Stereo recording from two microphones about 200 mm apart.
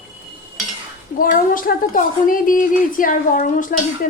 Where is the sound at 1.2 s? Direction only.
45° left (ahead or behind).